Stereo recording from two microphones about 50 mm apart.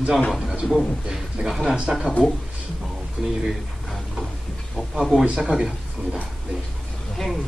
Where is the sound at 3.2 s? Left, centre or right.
Centre.